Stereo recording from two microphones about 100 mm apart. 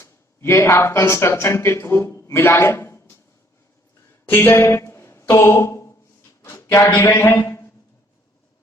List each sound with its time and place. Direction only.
0.0 s speech: 25° left (ahead or behind)
4.3 s a sound: 20° left (ahead or behind)
7.2 s a man's voice: 20° left (ahead or behind)